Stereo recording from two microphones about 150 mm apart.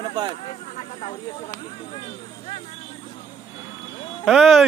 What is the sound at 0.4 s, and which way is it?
Speech, 40° left (ahead or behind).